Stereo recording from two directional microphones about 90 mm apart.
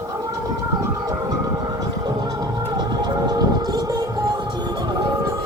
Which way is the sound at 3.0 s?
50° right (ahead or behind).